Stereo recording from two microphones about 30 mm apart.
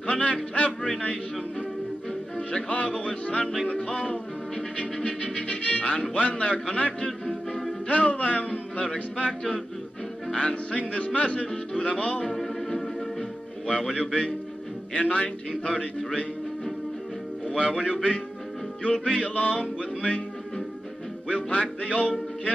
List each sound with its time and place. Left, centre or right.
0.0 s music: left
2.7 s music: left
10.3 s music: left
12.4 s music: centre
13.7 s music: left
17.6 s music: left
21.3 s music: left